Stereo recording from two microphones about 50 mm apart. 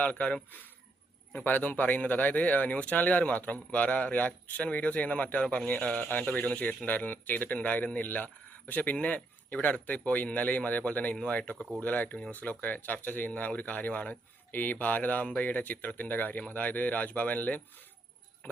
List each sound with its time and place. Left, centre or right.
0.0 s speech: left
1.4 s speech: left